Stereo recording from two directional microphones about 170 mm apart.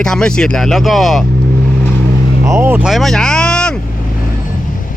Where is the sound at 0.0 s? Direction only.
5° left (ahead or behind).